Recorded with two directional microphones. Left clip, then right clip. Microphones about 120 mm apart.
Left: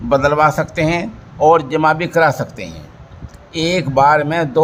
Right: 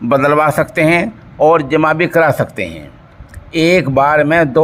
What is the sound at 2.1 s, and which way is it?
Speech, 50° right (ahead or behind).